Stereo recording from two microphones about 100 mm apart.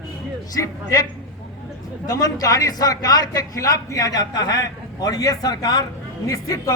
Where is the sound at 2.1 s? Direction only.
35° left (ahead or behind).